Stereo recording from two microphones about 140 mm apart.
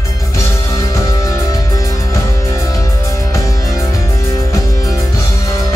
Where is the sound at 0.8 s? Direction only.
20° left (ahead or behind).